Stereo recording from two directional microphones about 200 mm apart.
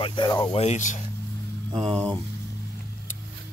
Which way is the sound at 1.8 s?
5° left (ahead or behind).